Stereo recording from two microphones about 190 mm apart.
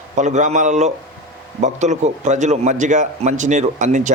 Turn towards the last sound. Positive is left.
turn(degrees=-40)  # may be behind; listen again after turning